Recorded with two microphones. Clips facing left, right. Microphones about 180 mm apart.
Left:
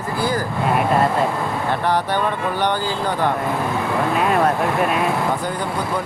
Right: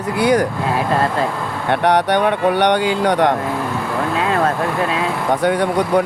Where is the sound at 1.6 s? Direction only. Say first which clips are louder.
Right 7 dB; 70° right (ahead or behind).